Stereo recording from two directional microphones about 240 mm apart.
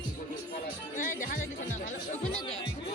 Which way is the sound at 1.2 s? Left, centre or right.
Left.